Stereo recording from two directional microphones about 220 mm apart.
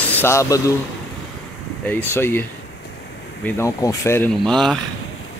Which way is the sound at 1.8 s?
10° left (ahead or behind).